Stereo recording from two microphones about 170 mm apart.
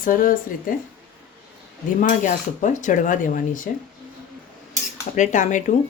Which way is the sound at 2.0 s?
45° left (ahead or behind).